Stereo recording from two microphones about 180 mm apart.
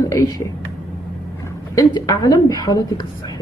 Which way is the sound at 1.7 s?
20° left (ahead or behind).